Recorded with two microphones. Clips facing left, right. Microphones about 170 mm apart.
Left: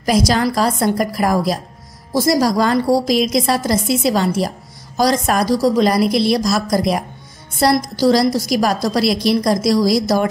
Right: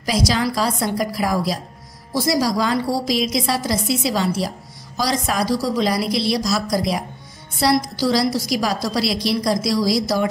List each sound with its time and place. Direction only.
0.0 s a woman's voice: 50° left (ahead or behind)